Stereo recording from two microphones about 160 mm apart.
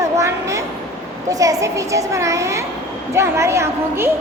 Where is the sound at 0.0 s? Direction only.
20° right (ahead or behind).